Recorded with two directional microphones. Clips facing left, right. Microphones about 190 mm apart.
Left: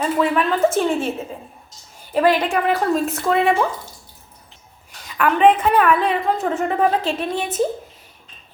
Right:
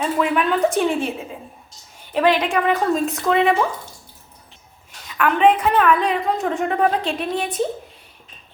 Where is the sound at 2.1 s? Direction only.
5° left (ahead or behind).